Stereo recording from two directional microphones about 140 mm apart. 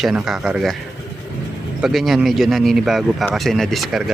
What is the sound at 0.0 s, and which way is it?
Speech, centre (ahead or behind).